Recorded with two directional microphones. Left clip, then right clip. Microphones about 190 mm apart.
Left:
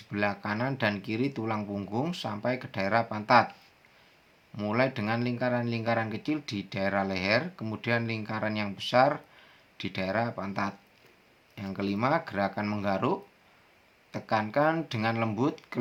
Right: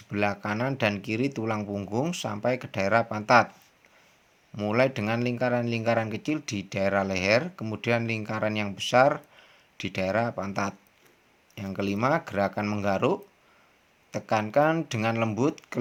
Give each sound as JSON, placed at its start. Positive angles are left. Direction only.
{"t": 0.1, "sound": "speech", "side_deg": -40}
{"t": 4.5, "sound": "speech", "side_deg": -40}